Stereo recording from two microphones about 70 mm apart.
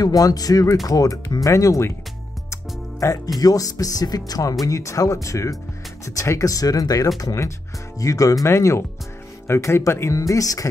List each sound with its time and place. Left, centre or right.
0.0 s speech: left
2.5 s music: left
3.3 s speech: left
4.6 s speech: left
8.5 s speech: left